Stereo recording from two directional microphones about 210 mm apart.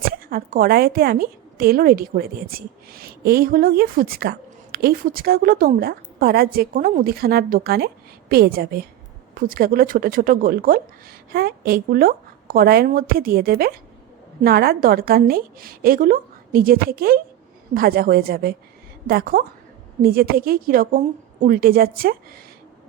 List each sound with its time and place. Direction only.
0.3 s a woman's voice: 45° right (ahead or behind)